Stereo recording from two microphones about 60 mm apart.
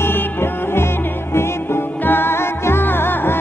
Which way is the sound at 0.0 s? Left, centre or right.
Left.